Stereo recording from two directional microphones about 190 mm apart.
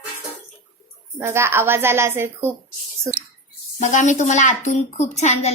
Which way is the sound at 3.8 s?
40° left (ahead or behind).